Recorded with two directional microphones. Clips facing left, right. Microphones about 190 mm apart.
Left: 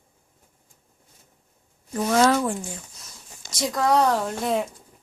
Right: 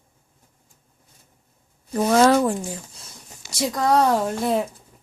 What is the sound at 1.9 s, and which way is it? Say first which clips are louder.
Speech: right 3 dB; 35° right (ahead or behind).